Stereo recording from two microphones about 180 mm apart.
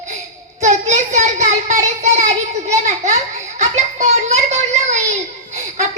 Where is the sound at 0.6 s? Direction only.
40° right (ahead or behind).